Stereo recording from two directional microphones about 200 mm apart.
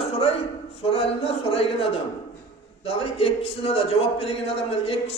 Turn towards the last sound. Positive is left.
turn(degrees=30)  # may be behind; listen again after turning